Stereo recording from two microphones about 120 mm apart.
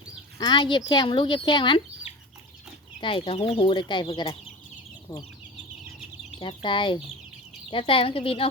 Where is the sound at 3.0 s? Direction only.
50° left (ahead or behind).